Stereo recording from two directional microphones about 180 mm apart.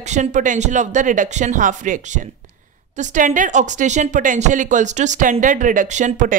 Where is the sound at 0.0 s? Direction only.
40° right (ahead or behind).